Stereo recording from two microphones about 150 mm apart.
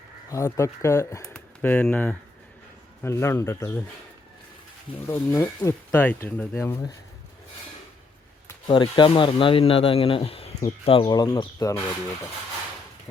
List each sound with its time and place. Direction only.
0.3 s speech: 20° left (ahead or behind)
1.2 s speech: 10° left (ahead or behind)
5.0 s speech: 15° left (ahead or behind)
8.6 s speech: 30° left (ahead or behind)
11.1 s speech: 25° left (ahead or behind)